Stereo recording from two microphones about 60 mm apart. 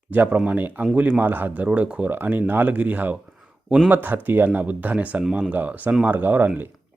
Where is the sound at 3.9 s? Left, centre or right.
Right.